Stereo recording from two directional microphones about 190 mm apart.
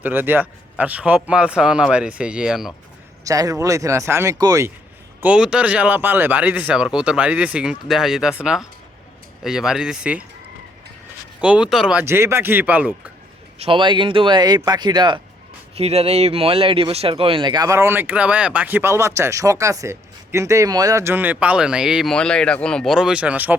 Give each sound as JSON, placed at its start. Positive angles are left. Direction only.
{"t": 0.0, "sound": "speech", "side_deg": -10}
{"t": 3.2, "sound": "speech", "side_deg": -20}
{"t": 5.2, "sound": "speech", "side_deg": -5}
{"t": 11.3, "sound": "speech", "side_deg": -5}
{"t": 13.6, "sound": "speech", "side_deg": -25}